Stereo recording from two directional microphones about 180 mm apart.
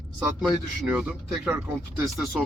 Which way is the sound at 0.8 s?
10° right (ahead or behind).